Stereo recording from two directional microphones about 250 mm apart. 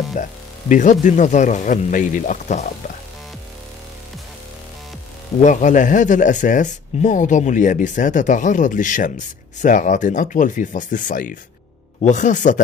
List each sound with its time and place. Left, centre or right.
0.2 s speech: left
5.4 s speech: left